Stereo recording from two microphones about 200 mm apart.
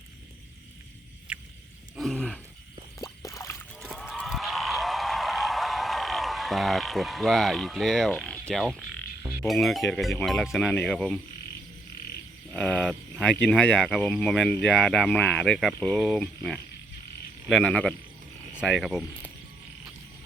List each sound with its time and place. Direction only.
1.3 s a sound: 5° right (ahead or behind)
2.0 s wild animals: 5° left (ahead or behind)
3.0 s drip: 15° left (ahead or behind)
3.8 s a sound: centre (ahead or behind)
9.2 s speech: centre (ahead or behind)
12.5 s speech: 5° left (ahead or behind)